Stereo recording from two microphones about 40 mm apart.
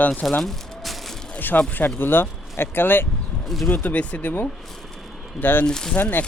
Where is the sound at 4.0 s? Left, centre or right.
Left.